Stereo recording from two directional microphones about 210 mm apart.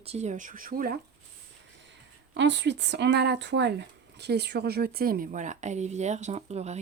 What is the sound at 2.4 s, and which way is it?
Speech, 60° right (ahead or behind).